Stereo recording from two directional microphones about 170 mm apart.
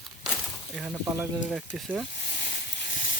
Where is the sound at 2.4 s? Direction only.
75° left (ahead or behind).